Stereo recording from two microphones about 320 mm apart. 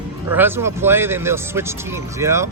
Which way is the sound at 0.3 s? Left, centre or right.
Centre.